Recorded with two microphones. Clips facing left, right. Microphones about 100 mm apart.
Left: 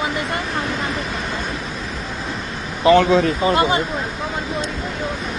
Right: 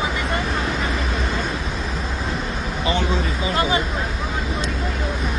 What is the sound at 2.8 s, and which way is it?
Speech, 90° left.